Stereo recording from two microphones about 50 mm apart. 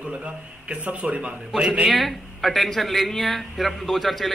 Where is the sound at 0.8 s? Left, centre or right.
Right.